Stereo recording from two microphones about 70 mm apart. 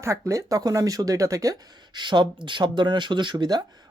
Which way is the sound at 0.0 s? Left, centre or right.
Right.